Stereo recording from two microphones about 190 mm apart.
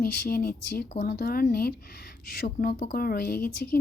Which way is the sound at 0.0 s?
55° left (ahead or behind).